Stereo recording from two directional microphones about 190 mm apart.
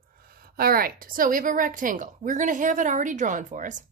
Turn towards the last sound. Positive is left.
turn(degrees=-40)  # may be behind; listen again after turning